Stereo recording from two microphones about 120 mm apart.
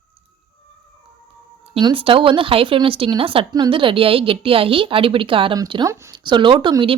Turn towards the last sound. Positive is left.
turn(degrees=-40)  # may be behind; listen again after turning